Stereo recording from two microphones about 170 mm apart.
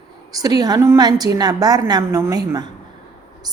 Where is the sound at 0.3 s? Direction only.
20° right (ahead or behind).